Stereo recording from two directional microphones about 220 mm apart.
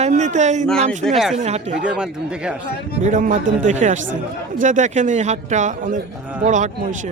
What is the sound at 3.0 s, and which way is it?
Speech, 35° right (ahead or behind).